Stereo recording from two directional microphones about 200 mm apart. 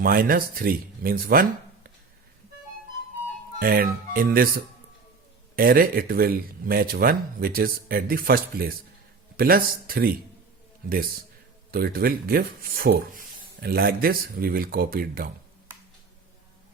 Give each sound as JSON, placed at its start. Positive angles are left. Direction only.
{"t": 0.0, "sound": "speech", "side_deg": -45}
{"t": 3.6, "sound": "speech", "side_deg": -45}
{"t": 11.7, "sound": "speech", "side_deg": -50}